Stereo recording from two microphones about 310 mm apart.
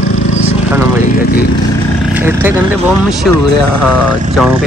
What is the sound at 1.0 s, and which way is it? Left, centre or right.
Speech, left.